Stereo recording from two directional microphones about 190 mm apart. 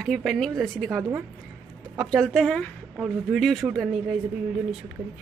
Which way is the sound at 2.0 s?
Centre (ahead or behind).